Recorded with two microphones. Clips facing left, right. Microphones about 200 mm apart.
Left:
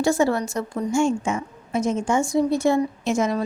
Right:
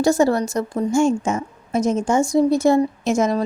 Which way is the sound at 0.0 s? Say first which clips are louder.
Right 3 dB; 40° right (ahead or behind).